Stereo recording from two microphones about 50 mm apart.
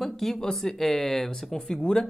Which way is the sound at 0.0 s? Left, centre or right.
Centre.